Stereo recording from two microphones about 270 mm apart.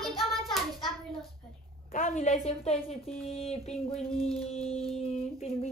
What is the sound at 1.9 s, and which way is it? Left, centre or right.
A woman's voice, left.